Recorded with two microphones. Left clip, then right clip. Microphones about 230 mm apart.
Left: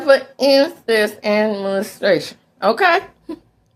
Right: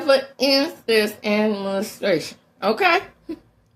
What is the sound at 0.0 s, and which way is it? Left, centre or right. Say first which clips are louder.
Speech: left 4 dB; centre.